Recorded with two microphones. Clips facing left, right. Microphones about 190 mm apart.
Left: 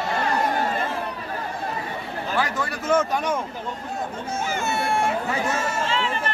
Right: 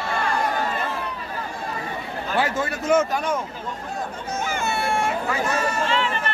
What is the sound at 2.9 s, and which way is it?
Speech, 10° right (ahead or behind).